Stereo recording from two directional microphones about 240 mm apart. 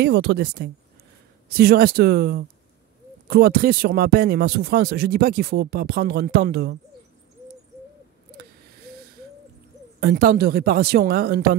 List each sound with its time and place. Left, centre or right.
0.0 s speech: right
9.9 s speech: right